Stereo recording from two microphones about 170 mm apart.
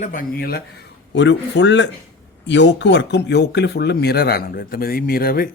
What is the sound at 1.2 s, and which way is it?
A man's voice, 90° left.